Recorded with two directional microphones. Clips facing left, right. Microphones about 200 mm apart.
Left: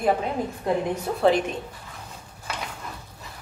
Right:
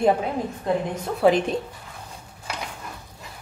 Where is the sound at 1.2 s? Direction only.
10° right (ahead or behind).